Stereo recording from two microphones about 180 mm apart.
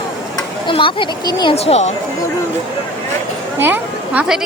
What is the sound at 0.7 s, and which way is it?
Speech, 30° left (ahead or behind).